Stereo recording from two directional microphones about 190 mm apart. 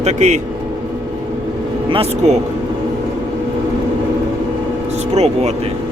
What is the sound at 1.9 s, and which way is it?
Speech, 35° right (ahead or behind).